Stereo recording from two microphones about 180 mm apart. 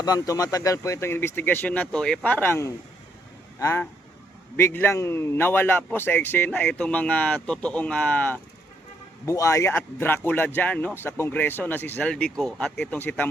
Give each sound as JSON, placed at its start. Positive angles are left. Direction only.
{"t": 0.0, "sound": "a man's voice", "side_deg": 20}